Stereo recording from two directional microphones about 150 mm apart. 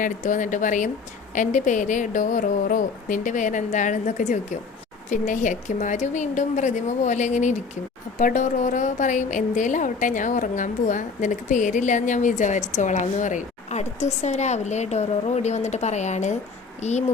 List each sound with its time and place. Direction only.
0.0 s a woman's voice: 60° left (ahead or behind)